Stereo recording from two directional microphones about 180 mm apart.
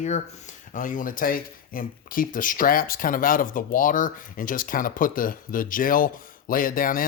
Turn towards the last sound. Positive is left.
turn(degrees=50)  # may be behind; listen again after turning